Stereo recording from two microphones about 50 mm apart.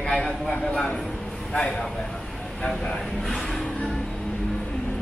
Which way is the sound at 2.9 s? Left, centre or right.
Centre.